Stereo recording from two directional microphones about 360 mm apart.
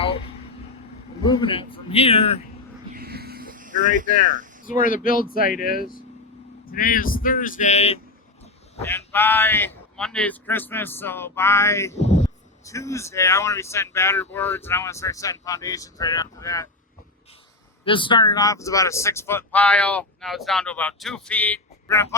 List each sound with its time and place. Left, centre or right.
1.2 s speech: centre
2.9 s a sound: right
4.6 s speech: left
8.8 s speech: centre
17.8 s speech: centre